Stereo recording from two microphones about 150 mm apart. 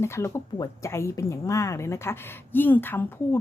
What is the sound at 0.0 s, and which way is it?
A woman's voice, 20° left (ahead or behind).